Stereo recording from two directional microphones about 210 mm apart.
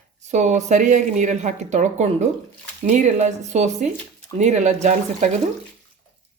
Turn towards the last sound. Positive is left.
turn(degrees=-35)  # may be behind; listen again after turning